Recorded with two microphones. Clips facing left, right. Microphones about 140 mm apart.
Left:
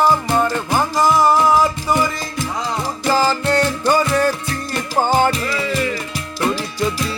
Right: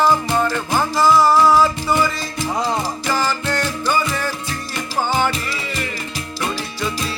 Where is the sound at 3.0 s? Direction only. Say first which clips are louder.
Left 8 dB; 30° left (ahead or behind).